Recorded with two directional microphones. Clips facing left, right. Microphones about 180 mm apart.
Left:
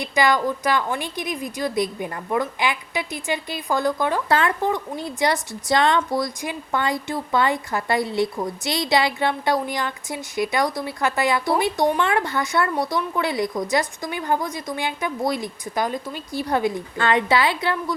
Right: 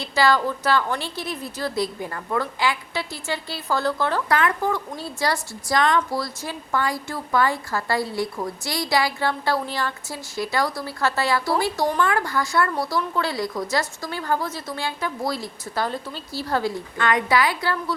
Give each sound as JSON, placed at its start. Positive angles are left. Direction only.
{"t": 0.0, "sound": "a woman's voice", "side_deg": 15}
{"t": 4.3, "sound": "a woman's voice", "side_deg": 30}